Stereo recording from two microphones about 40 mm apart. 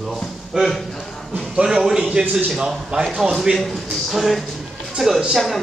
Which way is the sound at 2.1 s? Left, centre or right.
Right.